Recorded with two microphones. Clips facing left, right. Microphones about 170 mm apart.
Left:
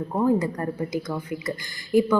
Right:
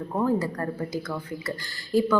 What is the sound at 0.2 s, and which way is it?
A woman's voice, 15° left (ahead or behind).